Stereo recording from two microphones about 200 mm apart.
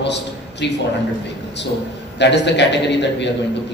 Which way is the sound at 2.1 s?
60° left (ahead or behind).